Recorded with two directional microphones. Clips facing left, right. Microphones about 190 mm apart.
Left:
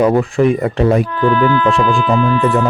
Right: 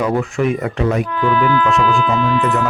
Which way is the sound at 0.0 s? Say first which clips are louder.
Left 5 dB; 35° left (ahead or behind).